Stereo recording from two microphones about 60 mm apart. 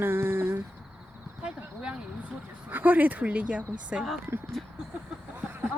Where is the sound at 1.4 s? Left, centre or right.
Centre.